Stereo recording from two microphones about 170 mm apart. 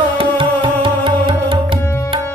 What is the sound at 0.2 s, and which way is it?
Music, 30° right (ahead or behind).